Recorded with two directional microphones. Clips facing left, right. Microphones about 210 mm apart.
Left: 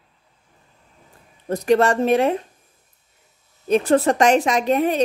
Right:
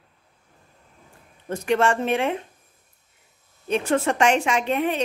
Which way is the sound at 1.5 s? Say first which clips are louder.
Left 4 dB; 35° left (ahead or behind).